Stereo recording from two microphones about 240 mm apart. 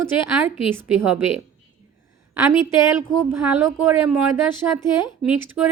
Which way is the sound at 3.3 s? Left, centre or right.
Centre.